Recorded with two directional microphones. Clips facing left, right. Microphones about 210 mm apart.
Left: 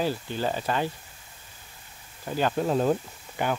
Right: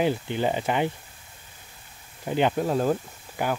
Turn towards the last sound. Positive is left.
turn(degrees=-10)  # may be behind; listen again after turning